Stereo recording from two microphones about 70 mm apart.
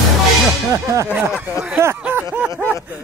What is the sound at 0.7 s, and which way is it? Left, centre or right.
Speech, right.